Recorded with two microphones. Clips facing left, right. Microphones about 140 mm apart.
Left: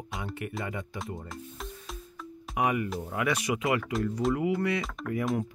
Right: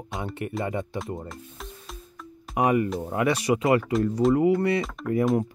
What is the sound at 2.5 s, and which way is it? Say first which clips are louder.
Speech: right 6 dB; 35° right (ahead or behind).